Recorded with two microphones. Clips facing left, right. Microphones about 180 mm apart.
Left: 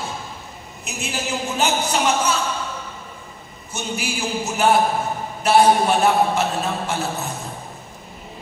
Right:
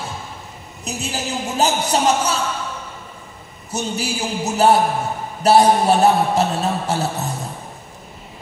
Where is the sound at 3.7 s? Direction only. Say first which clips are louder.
Right 3 dB; 40° right (ahead or behind).